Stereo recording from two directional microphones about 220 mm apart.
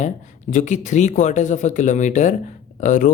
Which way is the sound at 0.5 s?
35° left (ahead or behind).